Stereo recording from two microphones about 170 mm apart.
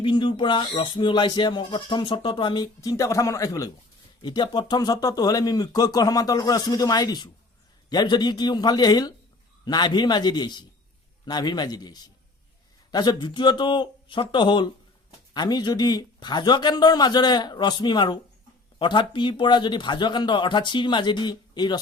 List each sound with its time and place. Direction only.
0.0 s speech: 30° left (ahead or behind)